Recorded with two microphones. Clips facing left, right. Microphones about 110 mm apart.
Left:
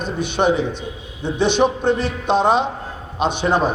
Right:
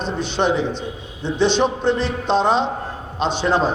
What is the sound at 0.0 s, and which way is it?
A man's voice, 15° left (ahead or behind).